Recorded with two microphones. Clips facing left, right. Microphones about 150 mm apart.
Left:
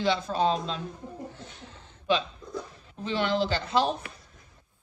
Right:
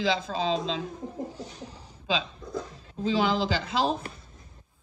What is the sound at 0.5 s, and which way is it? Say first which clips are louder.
Speech: right 1 dB; 90° right.